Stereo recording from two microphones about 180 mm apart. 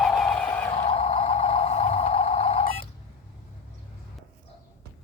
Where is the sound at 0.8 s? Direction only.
35° left (ahead or behind).